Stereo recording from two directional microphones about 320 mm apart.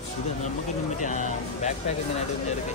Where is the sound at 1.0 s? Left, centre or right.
Left.